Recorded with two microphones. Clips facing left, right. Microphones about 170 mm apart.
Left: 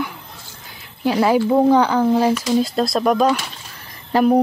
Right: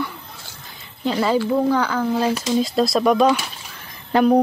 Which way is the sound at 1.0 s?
10° left (ahead or behind).